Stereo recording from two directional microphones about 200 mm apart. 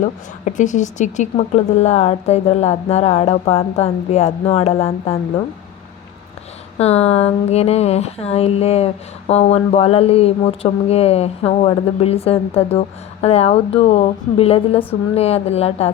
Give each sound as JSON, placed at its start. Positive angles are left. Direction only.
{"t": 0.0, "sound": "speech", "side_deg": 40}
{"t": 6.7, "sound": "speech", "side_deg": 30}